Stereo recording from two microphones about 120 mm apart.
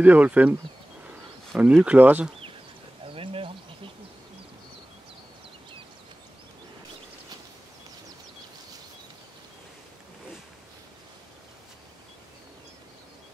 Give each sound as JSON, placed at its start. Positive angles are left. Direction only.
{"t": 0.0, "sound": "speech", "side_deg": -15}
{"t": 1.6, "sound": "speech", "side_deg": -10}
{"t": 3.1, "sound": "insect", "side_deg": -50}